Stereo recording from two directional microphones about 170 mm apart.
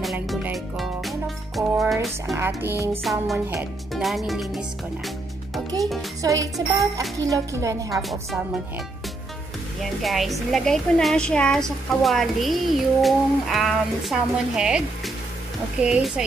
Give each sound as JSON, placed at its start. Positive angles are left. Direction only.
{"t": 0.0, "sound": "music", "side_deg": 0}
{"t": 1.6, "sound": "music", "side_deg": -20}
{"t": 2.3, "sound": "speech", "side_deg": -15}
{"t": 3.0, "sound": "a woman's voice", "side_deg": 0}
{"t": 3.3, "sound": "speech", "side_deg": -15}
{"t": 3.9, "sound": "speech", "side_deg": 0}
{"t": 6.2, "sound": "speech", "side_deg": -20}
{"t": 6.5, "sound": "a woman's voice", "side_deg": 0}
{"t": 7.2, "sound": "speech", "side_deg": -20}
{"t": 7.9, "sound": "a woman's voice", "side_deg": 0}
{"t": 9.8, "sound": "a woman's voice", "side_deg": 0}
{"t": 15.8, "sound": "a woman's voice", "side_deg": -5}